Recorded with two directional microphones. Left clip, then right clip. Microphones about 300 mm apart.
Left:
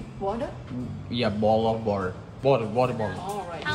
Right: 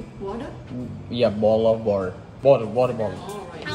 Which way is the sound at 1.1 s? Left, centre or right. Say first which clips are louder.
Right 4 dB; centre.